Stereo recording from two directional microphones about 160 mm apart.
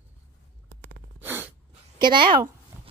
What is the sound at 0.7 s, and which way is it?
Gasp, 90° right.